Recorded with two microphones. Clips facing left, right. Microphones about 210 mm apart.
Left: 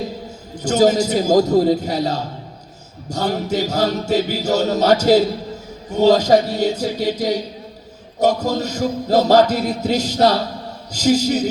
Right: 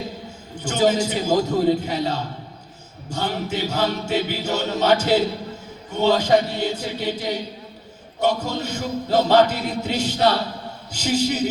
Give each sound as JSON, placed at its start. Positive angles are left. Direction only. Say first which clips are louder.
{"t": 0.5, "sound": "music", "louder": "left 5 dB", "side_deg": 40}